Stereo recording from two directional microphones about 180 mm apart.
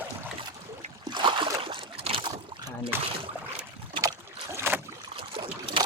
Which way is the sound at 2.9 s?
10° right (ahead or behind).